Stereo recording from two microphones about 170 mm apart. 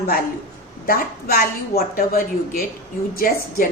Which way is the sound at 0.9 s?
60° left (ahead or behind).